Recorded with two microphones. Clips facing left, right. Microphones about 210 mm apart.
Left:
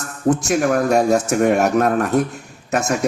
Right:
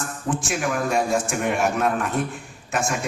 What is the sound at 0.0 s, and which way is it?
Speech, 40° left (ahead or behind).